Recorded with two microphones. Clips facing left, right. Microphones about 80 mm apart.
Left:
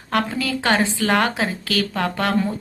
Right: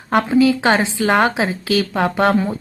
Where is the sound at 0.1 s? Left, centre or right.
Centre.